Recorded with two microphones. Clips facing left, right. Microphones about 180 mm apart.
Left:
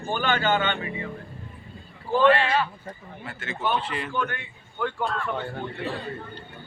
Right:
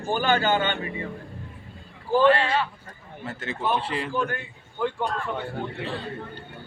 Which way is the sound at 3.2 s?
40° right (ahead or behind).